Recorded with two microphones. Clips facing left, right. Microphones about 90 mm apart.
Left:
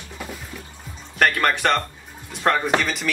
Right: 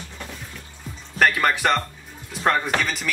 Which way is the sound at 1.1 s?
Centre (ahead or behind).